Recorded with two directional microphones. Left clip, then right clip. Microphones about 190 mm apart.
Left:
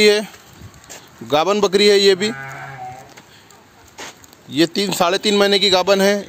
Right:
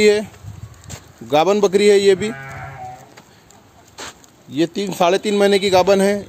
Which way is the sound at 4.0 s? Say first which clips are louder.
Right 1 dB; 5° left (ahead or behind).